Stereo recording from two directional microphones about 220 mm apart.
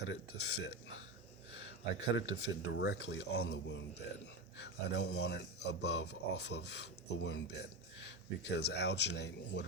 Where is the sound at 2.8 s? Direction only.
55° left (ahead or behind).